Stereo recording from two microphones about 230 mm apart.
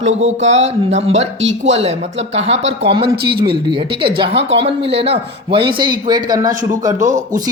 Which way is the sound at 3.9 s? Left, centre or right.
Right.